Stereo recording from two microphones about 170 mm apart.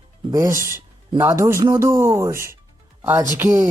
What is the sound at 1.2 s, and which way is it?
Speech, 15° right (ahead or behind).